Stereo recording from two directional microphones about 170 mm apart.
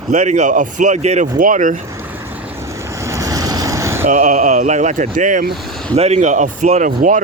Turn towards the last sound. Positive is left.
turn(degrees=-50)  # may be behind; listen again after turning